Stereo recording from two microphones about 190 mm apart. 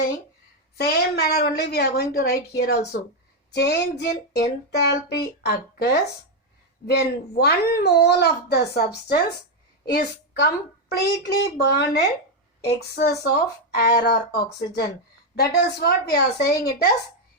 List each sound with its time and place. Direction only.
0.8 s a woman's voice: 55° left (ahead or behind)